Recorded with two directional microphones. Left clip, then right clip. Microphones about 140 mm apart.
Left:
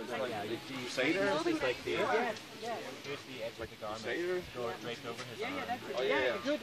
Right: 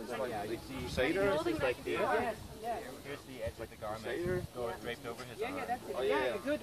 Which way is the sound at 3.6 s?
45° left (ahead or behind).